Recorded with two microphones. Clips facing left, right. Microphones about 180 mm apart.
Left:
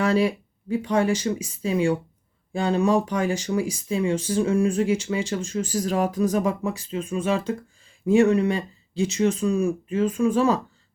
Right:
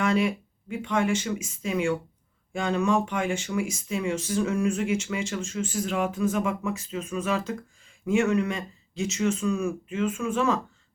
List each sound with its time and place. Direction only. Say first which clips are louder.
0.0 s speech: left 3 dB; 35° left (ahead or behind)